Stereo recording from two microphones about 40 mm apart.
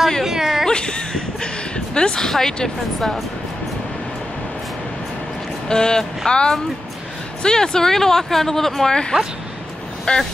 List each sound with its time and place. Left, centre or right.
0.2 s a sound: centre
0.7 s a sound: left
2.0 s speech: left
2.2 s speech: centre
5.7 s speech: centre
10.1 s speech: left